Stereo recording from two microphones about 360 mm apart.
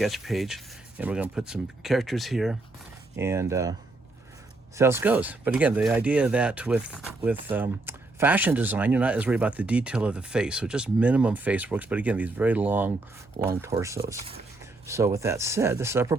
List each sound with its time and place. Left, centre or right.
0.0 s speech: centre
4.8 s speech: centre